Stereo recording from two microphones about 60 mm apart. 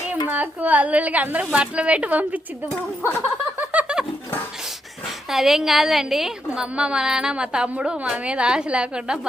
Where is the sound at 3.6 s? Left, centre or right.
Right.